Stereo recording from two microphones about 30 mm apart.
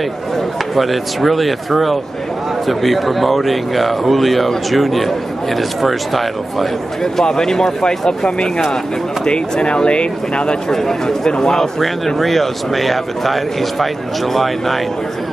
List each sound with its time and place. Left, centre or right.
0.7 s speech: centre
7.0 s speech: left
9.2 s speech: left
10.7 s a man's voice: centre
11.8 s speech: centre